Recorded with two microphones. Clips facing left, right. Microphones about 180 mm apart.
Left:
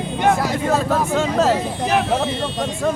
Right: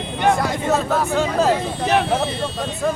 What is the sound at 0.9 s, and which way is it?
Speech, 5° right (ahead or behind).